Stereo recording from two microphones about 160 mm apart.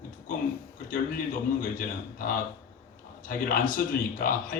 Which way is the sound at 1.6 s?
60° left (ahead or behind).